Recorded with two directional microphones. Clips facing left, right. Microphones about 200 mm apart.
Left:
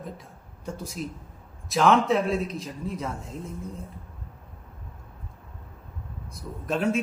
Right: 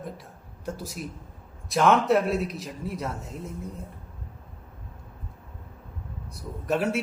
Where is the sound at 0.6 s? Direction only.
5° right (ahead or behind).